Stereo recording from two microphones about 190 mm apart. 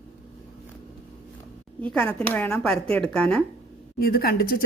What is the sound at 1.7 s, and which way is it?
Speech, 5° left (ahead or behind).